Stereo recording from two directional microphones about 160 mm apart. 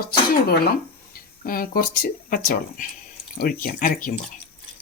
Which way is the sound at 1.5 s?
65° left (ahead or behind).